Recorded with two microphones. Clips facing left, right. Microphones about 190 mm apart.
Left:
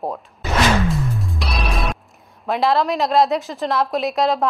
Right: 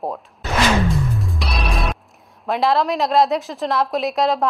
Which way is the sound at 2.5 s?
Centre (ahead or behind).